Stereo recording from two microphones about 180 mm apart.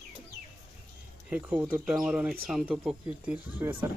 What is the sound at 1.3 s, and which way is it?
Speech, 10° right (ahead or behind).